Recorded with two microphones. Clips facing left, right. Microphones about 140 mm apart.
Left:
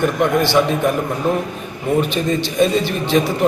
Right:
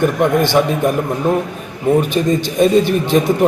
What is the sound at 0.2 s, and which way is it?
Speech, 15° right (ahead or behind).